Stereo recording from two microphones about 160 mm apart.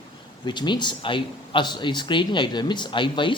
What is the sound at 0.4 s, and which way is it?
Speech, 30° left (ahead or behind).